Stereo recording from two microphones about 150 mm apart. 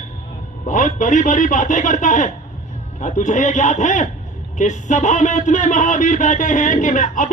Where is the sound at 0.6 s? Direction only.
55° left (ahead or behind).